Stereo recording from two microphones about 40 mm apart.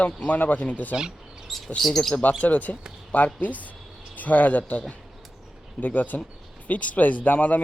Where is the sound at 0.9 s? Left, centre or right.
Centre.